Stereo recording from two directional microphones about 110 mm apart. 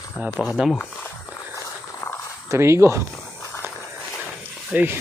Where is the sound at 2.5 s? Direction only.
25° right (ahead or behind).